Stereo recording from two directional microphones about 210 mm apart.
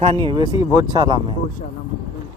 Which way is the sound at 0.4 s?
15° right (ahead or behind).